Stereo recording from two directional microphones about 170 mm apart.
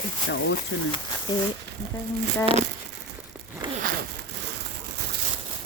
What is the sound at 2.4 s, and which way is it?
Speech, 35° right (ahead or behind).